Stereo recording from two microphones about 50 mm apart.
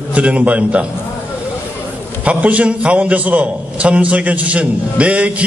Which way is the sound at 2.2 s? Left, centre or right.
Right.